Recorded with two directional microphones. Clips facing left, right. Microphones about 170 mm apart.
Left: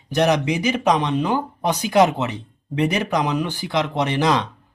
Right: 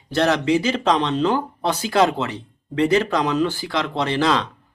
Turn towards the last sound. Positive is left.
turn(degrees=20)  # may be behind; listen again after turning